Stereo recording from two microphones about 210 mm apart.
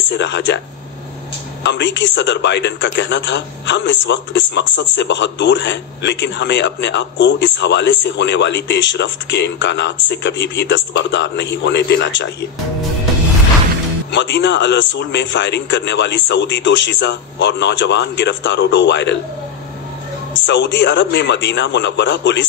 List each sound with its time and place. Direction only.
0.2 s a man's voice: 55° left (ahead or behind)
1.6 s a man's voice: 55° left (ahead or behind)
14.1 s a man's voice: 55° left (ahead or behind)
20.4 s a man's voice: 55° left (ahead or behind)